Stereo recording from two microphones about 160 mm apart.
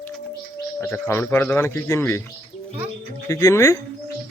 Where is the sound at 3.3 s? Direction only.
20° left (ahead or behind).